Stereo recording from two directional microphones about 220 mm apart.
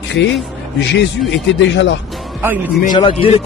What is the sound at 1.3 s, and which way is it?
Speech, 55° left (ahead or behind).